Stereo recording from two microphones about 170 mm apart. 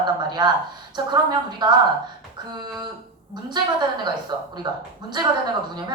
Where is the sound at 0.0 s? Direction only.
25° right (ahead or behind).